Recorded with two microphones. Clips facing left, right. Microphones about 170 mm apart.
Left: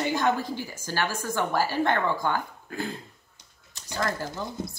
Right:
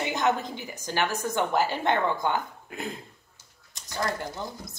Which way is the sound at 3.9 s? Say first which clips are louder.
Left 1 dB; 20° right (ahead or behind).